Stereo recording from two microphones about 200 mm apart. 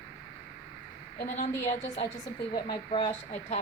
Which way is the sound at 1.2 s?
35° left (ahead or behind).